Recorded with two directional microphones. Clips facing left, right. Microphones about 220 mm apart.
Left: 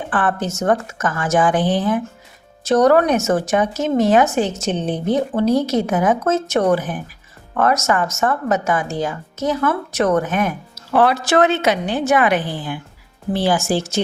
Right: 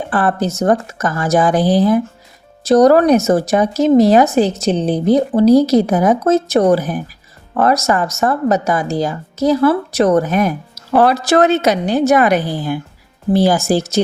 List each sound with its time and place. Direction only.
0.1 s speech: 35° right (ahead or behind)